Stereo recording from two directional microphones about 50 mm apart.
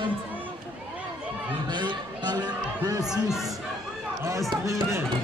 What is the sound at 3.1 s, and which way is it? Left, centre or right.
Speech, centre.